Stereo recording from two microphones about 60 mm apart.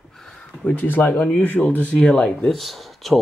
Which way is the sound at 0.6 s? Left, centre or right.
Left.